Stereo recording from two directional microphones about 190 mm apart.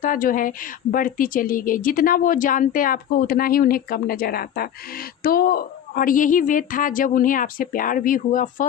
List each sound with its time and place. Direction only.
0.0 s a woman's voice: 45° left (ahead or behind)